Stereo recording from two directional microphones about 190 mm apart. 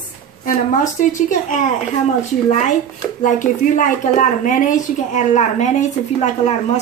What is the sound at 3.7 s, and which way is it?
A woman's voice, 40° left (ahead or behind).